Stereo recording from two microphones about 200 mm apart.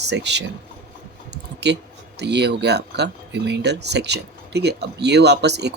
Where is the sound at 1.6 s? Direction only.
60° right (ahead or behind).